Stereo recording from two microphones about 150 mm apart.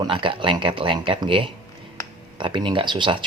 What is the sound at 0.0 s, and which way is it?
Speech, 35° right (ahead or behind).